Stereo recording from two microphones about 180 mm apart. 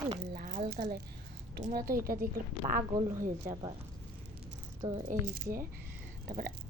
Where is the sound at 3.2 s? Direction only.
45° right (ahead or behind).